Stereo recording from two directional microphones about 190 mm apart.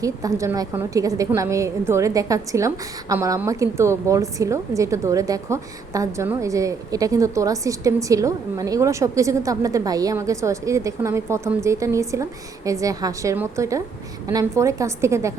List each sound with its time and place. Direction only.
0.0 s a woman's voice: 15° right (ahead or behind)